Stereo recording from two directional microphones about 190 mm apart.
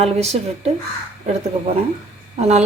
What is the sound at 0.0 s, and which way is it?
Speech, 35° right (ahead or behind).